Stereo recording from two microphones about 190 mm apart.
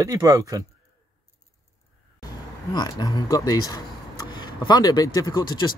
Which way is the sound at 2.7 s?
20° left (ahead or behind).